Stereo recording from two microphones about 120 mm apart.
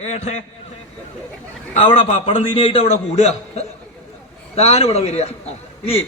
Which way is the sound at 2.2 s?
50° left (ahead or behind).